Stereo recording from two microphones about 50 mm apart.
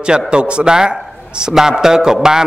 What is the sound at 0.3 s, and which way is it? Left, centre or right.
Speech, centre.